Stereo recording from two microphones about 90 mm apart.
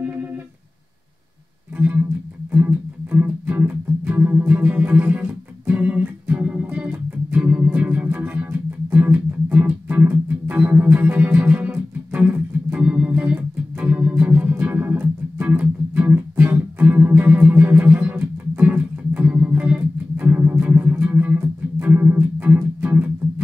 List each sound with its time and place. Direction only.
1.8 s music: 20° right (ahead or behind)